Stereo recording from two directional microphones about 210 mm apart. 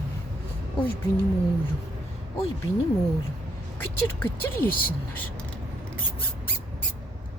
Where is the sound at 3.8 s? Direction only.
10° left (ahead or behind).